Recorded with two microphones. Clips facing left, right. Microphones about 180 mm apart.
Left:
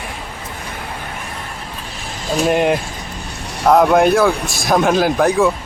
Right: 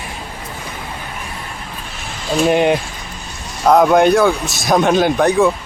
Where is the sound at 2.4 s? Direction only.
Centre (ahead or behind).